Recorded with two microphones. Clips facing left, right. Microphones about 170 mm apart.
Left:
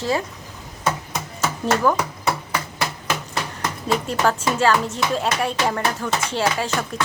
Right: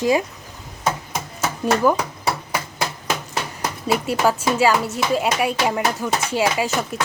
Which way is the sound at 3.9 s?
10° right (ahead or behind).